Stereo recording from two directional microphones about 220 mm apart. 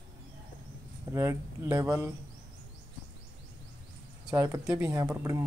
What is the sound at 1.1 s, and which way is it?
Speech, 15° right (ahead or behind).